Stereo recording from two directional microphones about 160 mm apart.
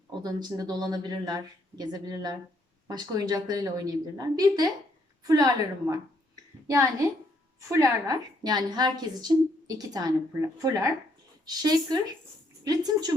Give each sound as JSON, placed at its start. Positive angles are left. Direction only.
{"t": 0.1, "sound": "a woman's voice", "side_deg": -25}